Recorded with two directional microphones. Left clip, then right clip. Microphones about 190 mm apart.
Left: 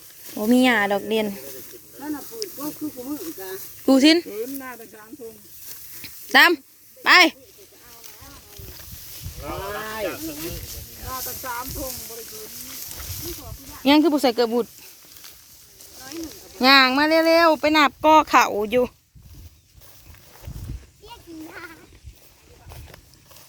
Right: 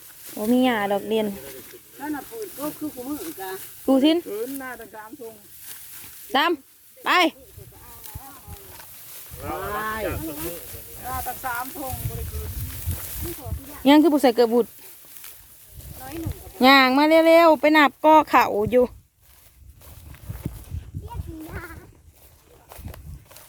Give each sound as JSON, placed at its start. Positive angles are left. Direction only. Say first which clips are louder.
{"t": 0.3, "sound": "speech", "louder": "left 3 dB", "side_deg": 15}
{"t": 2.0, "sound": "snake", "louder": "even", "side_deg": -5}
{"t": 3.8, "sound": "speech", "louder": "left 3 dB", "side_deg": 10}
{"t": 6.3, "sound": "speech", "louder": "left 7 dB", "side_deg": 5}
{"t": 9.4, "sound": "speech", "louder": "right 2 dB", "side_deg": -60}
{"t": 11.1, "sound": "speech", "louder": "right 2 dB", "side_deg": -10}
{"t": 11.9, "sound": "speech", "louder": "right 1 dB", "side_deg": -55}
{"t": 13.8, "sound": "speech", "louder": "right 1 dB", "side_deg": -15}
{"t": 16.0, "sound": "a sound", "louder": "even", "side_deg": -50}
{"t": 16.6, "sound": "speech", "louder": "even", "side_deg": -15}
{"t": 21.5, "sound": "sheep", "louder": "right 1 dB", "side_deg": 20}